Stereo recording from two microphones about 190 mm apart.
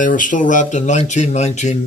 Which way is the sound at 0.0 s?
45° left (ahead or behind).